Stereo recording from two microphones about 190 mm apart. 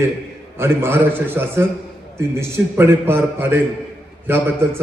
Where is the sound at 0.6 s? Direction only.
10° right (ahead or behind).